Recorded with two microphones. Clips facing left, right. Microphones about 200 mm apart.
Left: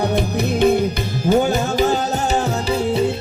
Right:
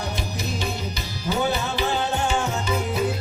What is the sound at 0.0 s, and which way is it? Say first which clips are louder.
Music: left 11 dB; 60° left (ahead or behind).